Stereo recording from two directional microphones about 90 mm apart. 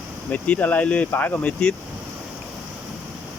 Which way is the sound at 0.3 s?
15° left (ahead or behind).